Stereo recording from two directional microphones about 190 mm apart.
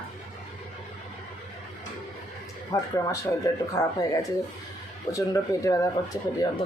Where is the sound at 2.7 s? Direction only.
15° left (ahead or behind).